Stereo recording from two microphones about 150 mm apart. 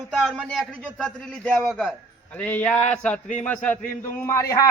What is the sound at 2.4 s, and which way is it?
A man's voice, 10° left (ahead or behind).